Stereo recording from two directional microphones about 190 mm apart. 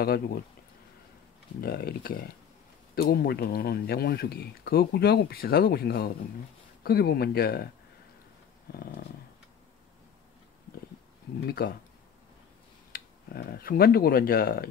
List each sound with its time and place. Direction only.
0.0 s speech: 50° left (ahead or behind)
1.6 s speech: 55° left (ahead or behind)
11.4 s speech: 55° left (ahead or behind)
12.9 s speech: 55° left (ahead or behind)